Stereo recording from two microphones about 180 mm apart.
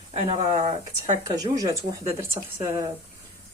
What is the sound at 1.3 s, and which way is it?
Speech, 20° right (ahead or behind).